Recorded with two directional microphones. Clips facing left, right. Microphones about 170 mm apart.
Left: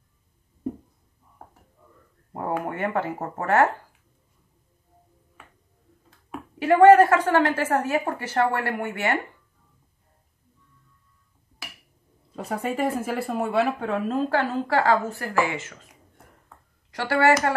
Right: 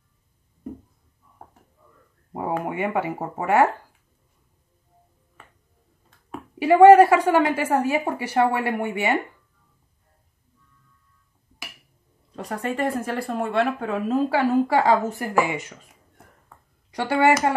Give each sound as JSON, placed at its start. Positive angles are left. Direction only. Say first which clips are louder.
{"t": 2.6, "sound": "a woman's voice", "louder": "right 2 dB", "side_deg": -10}
{"t": 6.6, "sound": "a woman's voice", "louder": "right 2 dB", "side_deg": -10}
{"t": 12.3, "sound": "speech", "louder": "even", "side_deg": 5}
{"t": 16.9, "sound": "a woman's voice", "louder": "right 2 dB", "side_deg": -15}